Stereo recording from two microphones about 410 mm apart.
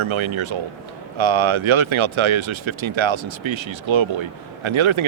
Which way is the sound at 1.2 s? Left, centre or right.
Right.